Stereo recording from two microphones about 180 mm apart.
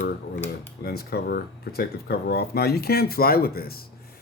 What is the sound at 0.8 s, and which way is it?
Speech, 65° left (ahead or behind).